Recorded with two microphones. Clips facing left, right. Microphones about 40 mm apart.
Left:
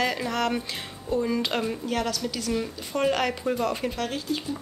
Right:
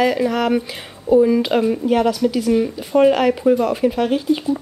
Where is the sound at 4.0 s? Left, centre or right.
Centre.